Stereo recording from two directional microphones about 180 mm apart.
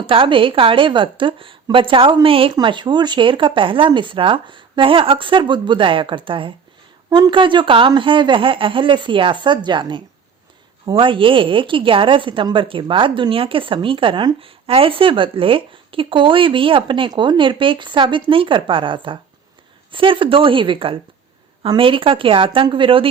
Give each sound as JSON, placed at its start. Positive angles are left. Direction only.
{"t": 0.1, "sound": "a woman's voice", "side_deg": -30}